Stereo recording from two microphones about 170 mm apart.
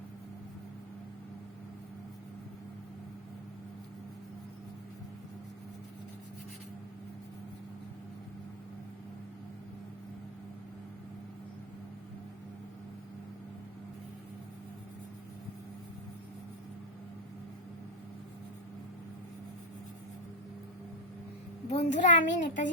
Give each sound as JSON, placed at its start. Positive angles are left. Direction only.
{"t": 21.7, "sound": "a child's voice", "side_deg": 40}